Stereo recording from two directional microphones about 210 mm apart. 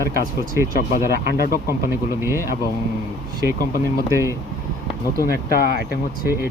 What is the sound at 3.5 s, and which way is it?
Speech, 45° left (ahead or behind).